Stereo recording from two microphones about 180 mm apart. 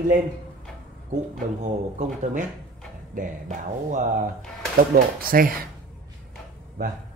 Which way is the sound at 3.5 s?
45° right (ahead or behind).